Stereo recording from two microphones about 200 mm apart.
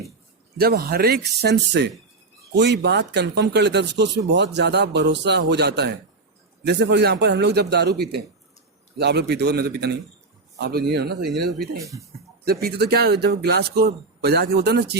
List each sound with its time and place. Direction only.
0.5 s a man's voice: 50° right (ahead or behind)
11.8 s speech: 15° right (ahead or behind)
12.5 s a man's voice: 50° right (ahead or behind)